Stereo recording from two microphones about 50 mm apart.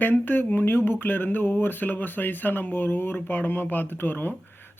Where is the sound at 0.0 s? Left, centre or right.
Left.